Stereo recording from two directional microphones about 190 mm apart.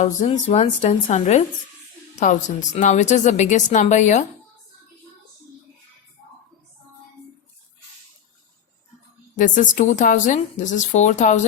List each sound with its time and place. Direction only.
0.3 s a woman's voice: 35° left (ahead or behind)
9.3 s a woman's voice: 45° left (ahead or behind)